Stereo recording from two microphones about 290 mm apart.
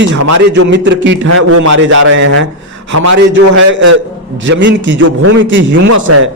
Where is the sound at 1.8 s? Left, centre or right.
Right.